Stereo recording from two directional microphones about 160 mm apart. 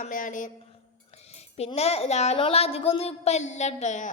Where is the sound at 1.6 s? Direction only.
40° left (ahead or behind).